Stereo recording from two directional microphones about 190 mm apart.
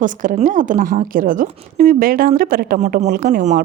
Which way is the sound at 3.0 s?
55° right (ahead or behind).